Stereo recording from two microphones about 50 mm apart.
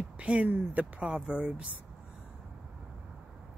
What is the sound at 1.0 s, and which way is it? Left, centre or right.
Speech, centre.